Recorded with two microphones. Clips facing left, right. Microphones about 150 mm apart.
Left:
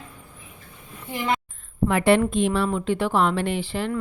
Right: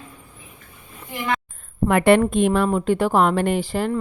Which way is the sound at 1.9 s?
55° right (ahead or behind).